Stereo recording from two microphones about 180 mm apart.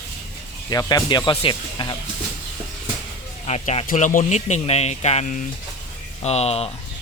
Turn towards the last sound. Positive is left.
turn(degrees=35)  # may be behind; listen again after turning